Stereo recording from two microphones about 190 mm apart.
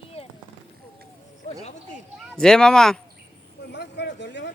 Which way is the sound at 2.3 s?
5° left (ahead or behind).